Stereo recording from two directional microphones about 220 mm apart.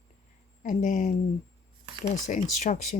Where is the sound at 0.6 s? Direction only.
35° left (ahead or behind).